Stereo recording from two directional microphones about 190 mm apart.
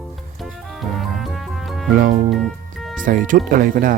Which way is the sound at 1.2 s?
Centre (ahead or behind).